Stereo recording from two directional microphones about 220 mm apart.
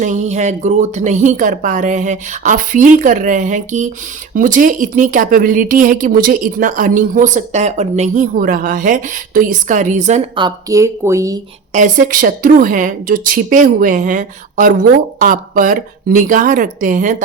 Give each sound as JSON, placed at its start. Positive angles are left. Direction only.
{"t": 0.0, "sound": "speech", "side_deg": -30}
{"t": 11.7, "sound": "speech", "side_deg": -35}